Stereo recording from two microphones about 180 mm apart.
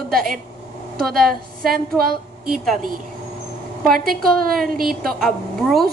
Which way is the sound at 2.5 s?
Centre (ahead or behind).